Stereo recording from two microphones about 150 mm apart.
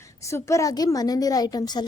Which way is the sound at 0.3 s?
20° left (ahead or behind).